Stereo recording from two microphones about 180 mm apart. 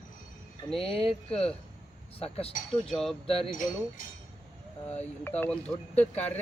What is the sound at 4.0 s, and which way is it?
Speech, 50° left (ahead or behind).